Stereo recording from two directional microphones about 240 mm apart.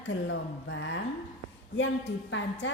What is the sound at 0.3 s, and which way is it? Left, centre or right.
Speech, left.